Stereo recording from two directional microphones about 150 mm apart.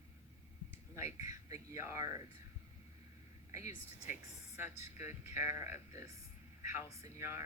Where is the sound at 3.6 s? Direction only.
50° left (ahead or behind).